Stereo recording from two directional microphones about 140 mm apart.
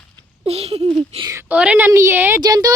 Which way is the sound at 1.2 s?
25° right (ahead or behind).